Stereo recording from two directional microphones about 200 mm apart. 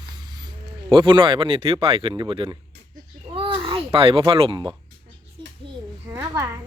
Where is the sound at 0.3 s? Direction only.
20° right (ahead or behind).